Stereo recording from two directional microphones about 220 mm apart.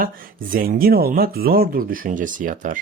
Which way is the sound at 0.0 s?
40° right (ahead or behind).